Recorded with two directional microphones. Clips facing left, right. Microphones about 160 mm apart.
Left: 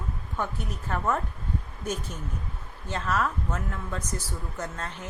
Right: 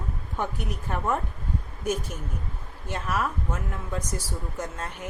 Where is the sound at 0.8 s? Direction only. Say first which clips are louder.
Even; 10° right (ahead or behind).